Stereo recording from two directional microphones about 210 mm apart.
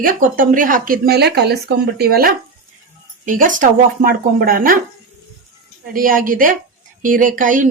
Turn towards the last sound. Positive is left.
turn(degrees=-40)  # may be behind; listen again after turning